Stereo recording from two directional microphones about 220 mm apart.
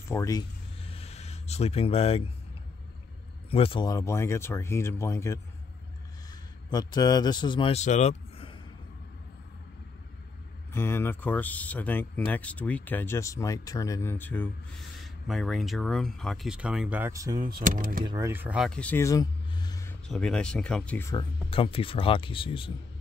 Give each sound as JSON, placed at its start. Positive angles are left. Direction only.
{"t": 0.1, "sound": "a sound", "side_deg": 15}
{"t": 3.4, "sound": "speech", "side_deg": 25}
{"t": 6.7, "sound": "speech", "side_deg": 20}
{"t": 10.7, "sound": "speech", "side_deg": 10}
{"t": 17.6, "sound": "speech", "side_deg": -40}
{"t": 18.0, "sound": "speech", "side_deg": -15}
{"t": 20.1, "sound": "speech", "side_deg": 5}
{"t": 21.1, "sound": "speech", "side_deg": 25}